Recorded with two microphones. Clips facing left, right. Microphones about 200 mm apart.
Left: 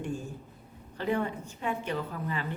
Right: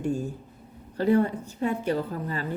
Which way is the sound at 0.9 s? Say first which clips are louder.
Right 8 dB; 40° right (ahead or behind).